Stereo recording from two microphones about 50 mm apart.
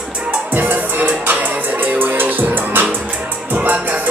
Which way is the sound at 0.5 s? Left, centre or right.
Right.